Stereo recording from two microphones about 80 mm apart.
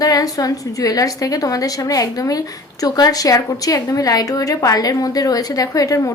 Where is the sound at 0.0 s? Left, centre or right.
Left.